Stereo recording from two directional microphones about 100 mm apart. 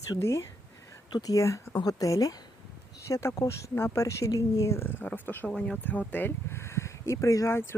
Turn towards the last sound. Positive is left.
turn(degrees=25)  # may be behind; listen again after turning